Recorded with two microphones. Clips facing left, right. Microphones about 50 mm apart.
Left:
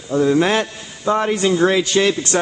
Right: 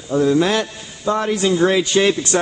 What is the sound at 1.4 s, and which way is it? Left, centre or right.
Speech, centre.